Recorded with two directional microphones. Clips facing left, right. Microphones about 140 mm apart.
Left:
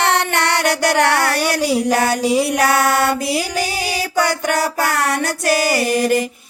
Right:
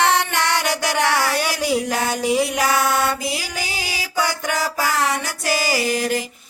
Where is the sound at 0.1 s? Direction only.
60° left (ahead or behind).